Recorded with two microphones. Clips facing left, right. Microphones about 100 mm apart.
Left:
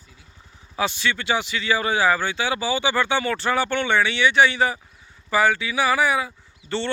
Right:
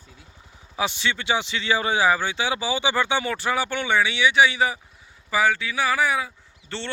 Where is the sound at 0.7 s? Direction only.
20° right (ahead or behind); by 6.9 s 5° left (ahead or behind).